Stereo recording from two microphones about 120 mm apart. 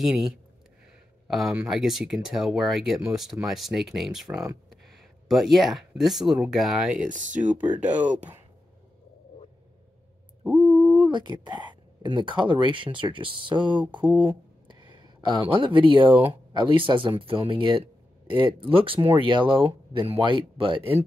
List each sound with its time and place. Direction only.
0.0 s speech: 5° right (ahead or behind)
7.1 s speech: 90° right
7.7 s speech: 10° right (ahead or behind)
10.4 s a sound: 15° right (ahead or behind)
11.0 s speech: 40° right (ahead or behind)